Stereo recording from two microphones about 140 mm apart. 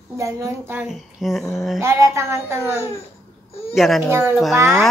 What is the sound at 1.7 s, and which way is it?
Speech, 20° right (ahead or behind).